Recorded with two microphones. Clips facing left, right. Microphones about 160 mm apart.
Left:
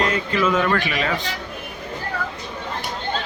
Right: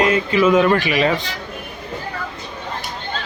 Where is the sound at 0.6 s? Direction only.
20° right (ahead or behind).